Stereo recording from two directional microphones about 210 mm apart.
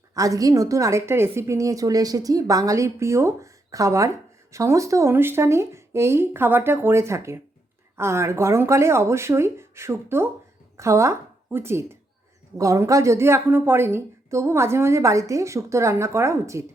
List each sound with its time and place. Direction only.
0.1 s a woman's voice: 15° right (ahead or behind)